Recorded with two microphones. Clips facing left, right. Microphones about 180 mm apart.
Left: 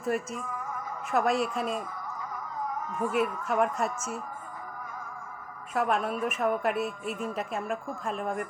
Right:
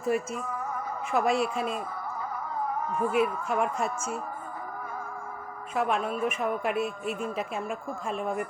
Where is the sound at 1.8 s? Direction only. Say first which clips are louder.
Right 3 dB; 35° right (ahead or behind).